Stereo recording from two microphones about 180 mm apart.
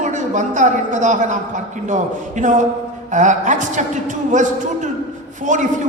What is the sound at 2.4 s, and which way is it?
A man's voice, 45° right (ahead or behind).